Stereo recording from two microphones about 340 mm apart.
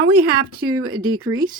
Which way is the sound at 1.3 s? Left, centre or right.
Centre.